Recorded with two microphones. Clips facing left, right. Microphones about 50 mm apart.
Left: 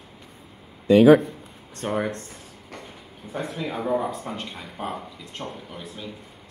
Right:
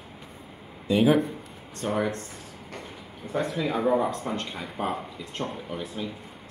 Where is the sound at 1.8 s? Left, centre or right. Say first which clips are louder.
Left 1 dB; left.